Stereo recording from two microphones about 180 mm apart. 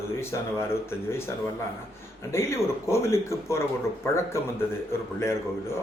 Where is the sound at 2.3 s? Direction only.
15° left (ahead or behind).